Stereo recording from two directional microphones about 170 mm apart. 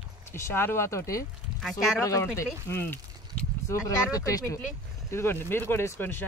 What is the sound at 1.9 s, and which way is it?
Speech, 20° left (ahead or behind).